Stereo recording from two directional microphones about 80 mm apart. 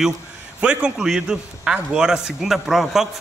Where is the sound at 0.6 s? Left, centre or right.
Centre.